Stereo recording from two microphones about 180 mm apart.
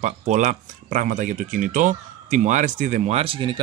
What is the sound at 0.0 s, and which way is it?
Speech, 40° right (ahead or behind).